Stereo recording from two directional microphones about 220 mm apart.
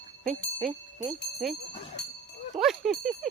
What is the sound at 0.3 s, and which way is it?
Speech, centre (ahead or behind).